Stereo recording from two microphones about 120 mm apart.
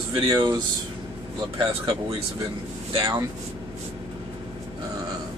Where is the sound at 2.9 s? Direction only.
40° right (ahead or behind).